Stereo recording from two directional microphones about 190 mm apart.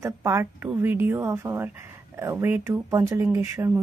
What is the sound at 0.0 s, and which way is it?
Speech, 15° right (ahead or behind).